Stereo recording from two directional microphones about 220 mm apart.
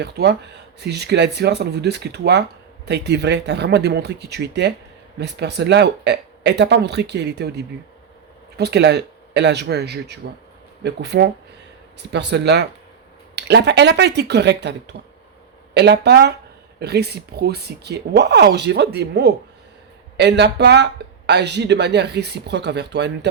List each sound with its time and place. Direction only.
0.0 s speech: 50° right (ahead or behind)